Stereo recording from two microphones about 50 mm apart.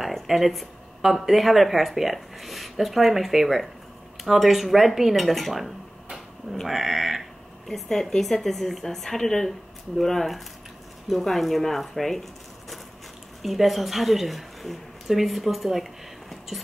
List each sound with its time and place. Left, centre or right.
0.3 s speech: centre
6.7 s a woman's voice: centre